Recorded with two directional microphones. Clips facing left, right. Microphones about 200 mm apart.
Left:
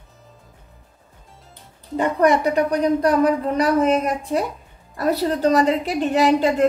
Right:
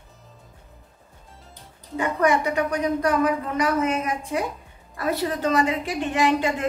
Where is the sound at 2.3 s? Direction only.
35° left (ahead or behind).